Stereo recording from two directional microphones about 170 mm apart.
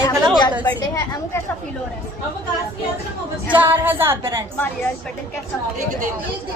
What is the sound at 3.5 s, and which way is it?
Female singing, 10° right (ahead or behind).